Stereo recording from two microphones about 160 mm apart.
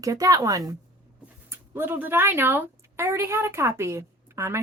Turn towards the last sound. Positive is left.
turn(degrees=-15)  # may be behind; listen again after turning